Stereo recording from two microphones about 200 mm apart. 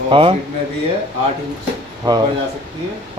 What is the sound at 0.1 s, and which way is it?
Speech, 25° right (ahead or behind).